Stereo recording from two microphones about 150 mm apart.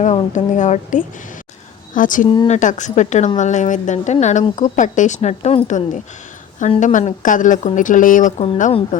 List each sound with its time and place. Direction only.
0.0 s a woman's voice: 55° left (ahead or behind)
2.2 s speech: 30° left (ahead or behind)
2.5 s a woman's voice: 55° left (ahead or behind)